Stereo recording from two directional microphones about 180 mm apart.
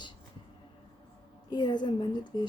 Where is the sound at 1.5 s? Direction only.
25° left (ahead or behind).